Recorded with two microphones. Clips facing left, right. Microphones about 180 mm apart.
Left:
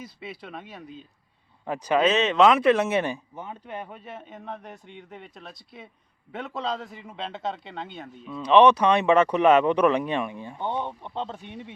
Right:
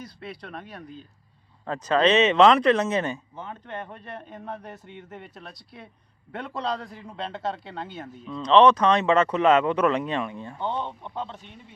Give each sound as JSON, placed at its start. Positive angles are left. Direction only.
{"t": 0.0, "sound": "speech", "side_deg": 0}
{"t": 1.6, "sound": "speech", "side_deg": 15}
{"t": 8.4, "sound": "speech", "side_deg": 10}
{"t": 11.4, "sound": "speech", "side_deg": 75}